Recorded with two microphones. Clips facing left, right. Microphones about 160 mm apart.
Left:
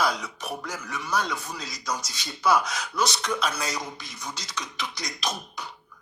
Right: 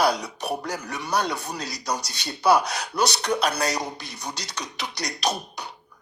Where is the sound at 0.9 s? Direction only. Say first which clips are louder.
Right 2 dB; 65° right (ahead or behind).